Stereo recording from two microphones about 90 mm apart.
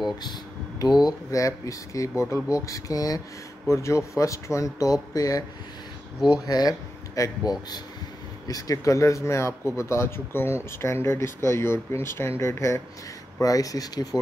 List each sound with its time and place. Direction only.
0.2 s a sound: 50° left (ahead or behind)
1.0 s speech: 40° left (ahead or behind)
13.4 s speech: 40° left (ahead or behind)